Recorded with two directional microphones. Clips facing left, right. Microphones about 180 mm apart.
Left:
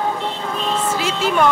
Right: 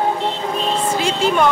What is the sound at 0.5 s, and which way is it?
Music, 30° right (ahead or behind).